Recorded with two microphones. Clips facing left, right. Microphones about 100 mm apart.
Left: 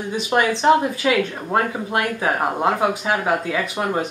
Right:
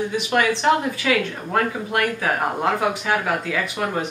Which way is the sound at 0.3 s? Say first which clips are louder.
Left 3 dB; 20° left (ahead or behind).